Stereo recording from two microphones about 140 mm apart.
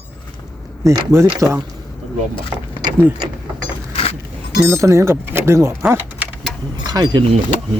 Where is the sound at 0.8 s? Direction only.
20° right (ahead or behind).